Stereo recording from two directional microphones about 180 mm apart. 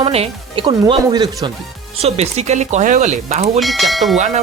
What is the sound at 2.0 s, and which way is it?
Speech, 35° right (ahead or behind).